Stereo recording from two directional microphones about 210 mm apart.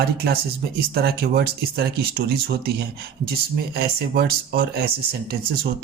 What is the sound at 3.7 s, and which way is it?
Speech, 45° right (ahead or behind).